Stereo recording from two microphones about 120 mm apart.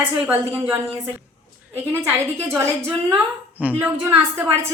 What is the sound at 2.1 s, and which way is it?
A woman's voice, 20° right (ahead or behind).